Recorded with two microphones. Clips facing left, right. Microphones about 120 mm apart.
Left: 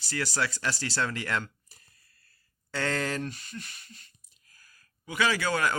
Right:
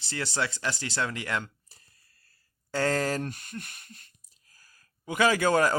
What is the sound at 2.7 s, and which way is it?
A man's voice, 35° right (ahead or behind).